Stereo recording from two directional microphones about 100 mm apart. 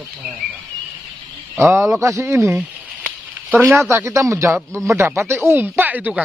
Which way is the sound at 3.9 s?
25° right (ahead or behind).